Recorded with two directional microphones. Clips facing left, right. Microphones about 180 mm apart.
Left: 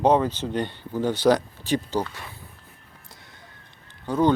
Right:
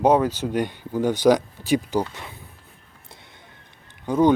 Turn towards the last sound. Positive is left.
turn(degrees=-15)  # may be behind; listen again after turning